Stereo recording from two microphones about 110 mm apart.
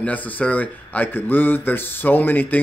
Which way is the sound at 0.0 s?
15° left (ahead or behind).